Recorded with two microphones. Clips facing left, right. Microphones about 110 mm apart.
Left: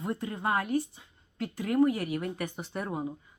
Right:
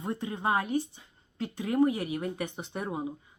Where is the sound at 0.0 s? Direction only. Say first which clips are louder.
Right 1 dB; 25° right (ahead or behind).